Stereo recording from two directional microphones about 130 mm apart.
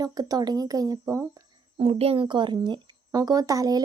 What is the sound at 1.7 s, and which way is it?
Speech, 50° right (ahead or behind).